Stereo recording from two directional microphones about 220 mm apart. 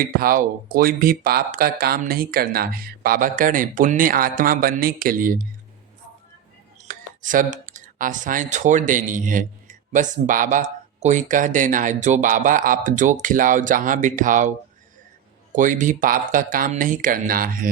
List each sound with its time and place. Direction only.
0.0 s speech: 40° right (ahead or behind)
6.8 s speech: 35° right (ahead or behind)
15.5 s speech: 35° right (ahead or behind)